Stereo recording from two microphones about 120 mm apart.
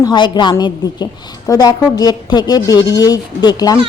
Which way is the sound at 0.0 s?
40° left (ahead or behind).